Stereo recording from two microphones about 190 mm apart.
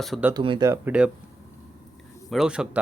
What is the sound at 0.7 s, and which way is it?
Speech, 10° right (ahead or behind).